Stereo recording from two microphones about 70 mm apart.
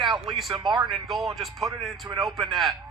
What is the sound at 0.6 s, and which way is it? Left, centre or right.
Speech, right.